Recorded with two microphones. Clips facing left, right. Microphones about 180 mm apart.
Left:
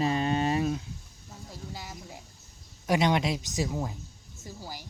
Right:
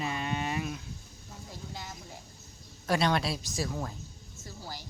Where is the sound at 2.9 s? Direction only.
15° left (ahead or behind).